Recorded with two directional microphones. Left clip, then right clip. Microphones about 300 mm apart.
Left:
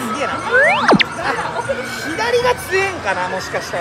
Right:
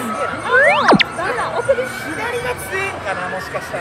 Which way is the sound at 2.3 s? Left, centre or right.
Left.